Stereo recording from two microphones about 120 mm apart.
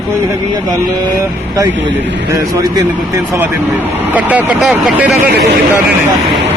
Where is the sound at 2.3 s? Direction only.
30° right (ahead or behind); by 5.1 s 5° right (ahead or behind).